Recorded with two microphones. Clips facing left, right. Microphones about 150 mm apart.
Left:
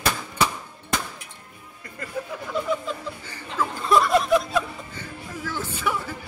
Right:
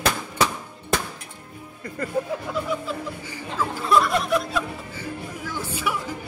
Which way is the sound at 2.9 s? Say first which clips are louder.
Right 2 dB; 5° right (ahead or behind).